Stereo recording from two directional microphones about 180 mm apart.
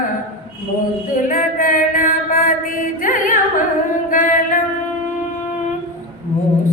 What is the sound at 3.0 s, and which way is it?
Music, 50° left (ahead or behind).